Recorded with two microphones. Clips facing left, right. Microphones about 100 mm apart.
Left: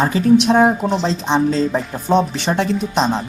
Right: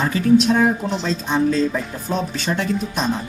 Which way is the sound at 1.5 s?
25° left (ahead or behind).